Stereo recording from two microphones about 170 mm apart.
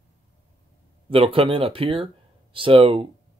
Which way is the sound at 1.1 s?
35° right (ahead or behind).